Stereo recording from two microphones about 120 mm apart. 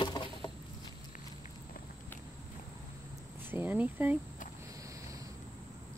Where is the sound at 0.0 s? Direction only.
40° left (ahead or behind).